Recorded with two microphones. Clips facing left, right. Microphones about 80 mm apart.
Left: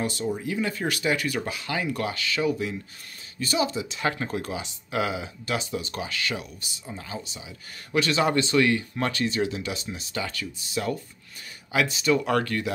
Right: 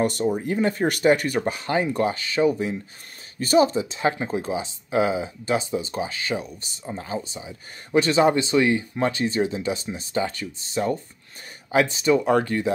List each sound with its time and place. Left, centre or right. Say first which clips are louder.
0.0 s speech: right 6 dB; right
4.2 s speech: right 4 dB; right